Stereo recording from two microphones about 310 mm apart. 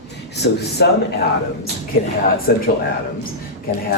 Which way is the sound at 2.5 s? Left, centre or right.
Left.